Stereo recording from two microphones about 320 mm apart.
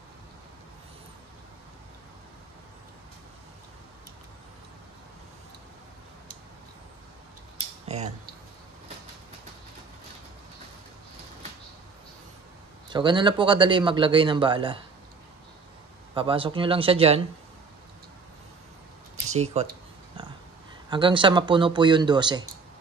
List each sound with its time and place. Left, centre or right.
7.8 s a sound: right
12.9 s a man's voice: centre
16.2 s a man's voice: centre
19.3 s speech: right
20.2 s pig: centre
20.9 s a man's voice: centre